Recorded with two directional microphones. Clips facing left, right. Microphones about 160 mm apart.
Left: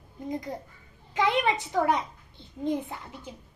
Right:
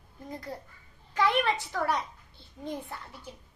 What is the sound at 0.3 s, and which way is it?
A child's voice, 15° left (ahead or behind).